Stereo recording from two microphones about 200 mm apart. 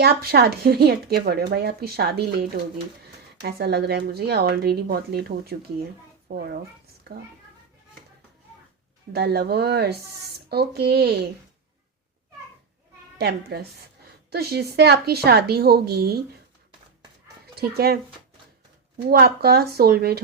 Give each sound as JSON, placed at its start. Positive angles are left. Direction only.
{"t": 0.0, "sound": "speech", "side_deg": -50}
{"t": 9.1, "sound": "speech", "side_deg": -55}
{"t": 13.1, "sound": "a woman's voice", "side_deg": -55}
{"t": 17.4, "sound": "speech", "side_deg": -50}
{"t": 19.0, "sound": "speech", "side_deg": -50}